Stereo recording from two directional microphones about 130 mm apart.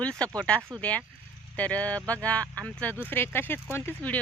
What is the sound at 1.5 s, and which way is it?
Speech, 10° left (ahead or behind).